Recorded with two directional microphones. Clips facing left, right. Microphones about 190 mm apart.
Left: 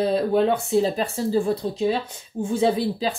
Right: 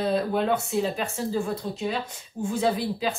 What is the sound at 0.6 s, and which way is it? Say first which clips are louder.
Speech: left 5 dB; 35° left (ahead or behind).